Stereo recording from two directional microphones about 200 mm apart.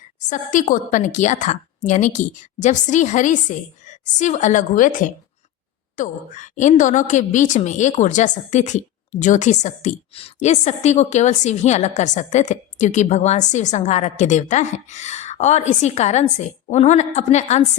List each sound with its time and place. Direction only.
0.2 s a woman's voice: 40° left (ahead or behind)